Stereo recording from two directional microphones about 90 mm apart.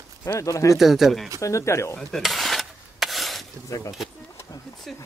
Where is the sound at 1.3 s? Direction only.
35° left (ahead or behind).